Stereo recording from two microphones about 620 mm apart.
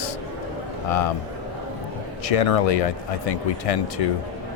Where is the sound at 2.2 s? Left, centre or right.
Left.